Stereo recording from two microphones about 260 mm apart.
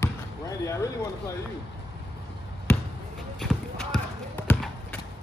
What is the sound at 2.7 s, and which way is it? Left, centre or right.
Basketball bounce, centre.